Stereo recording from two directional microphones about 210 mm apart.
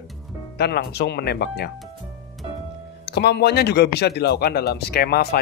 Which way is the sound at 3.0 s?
50° left (ahead or behind).